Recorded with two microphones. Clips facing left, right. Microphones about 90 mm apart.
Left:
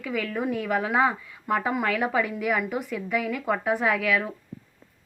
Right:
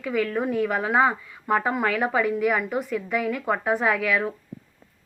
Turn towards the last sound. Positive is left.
turn(degrees=0)  # may be behind; listen again after turning